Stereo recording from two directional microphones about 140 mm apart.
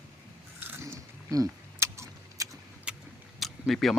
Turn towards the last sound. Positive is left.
turn(degrees=0)  # may be behind; listen again after turning